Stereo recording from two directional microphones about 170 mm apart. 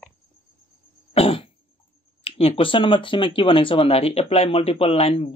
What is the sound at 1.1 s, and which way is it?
Cough, 35° left (ahead or behind).